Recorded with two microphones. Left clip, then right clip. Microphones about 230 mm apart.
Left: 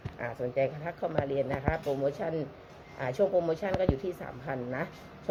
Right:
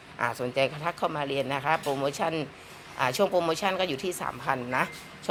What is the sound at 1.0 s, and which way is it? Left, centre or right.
Speech, right.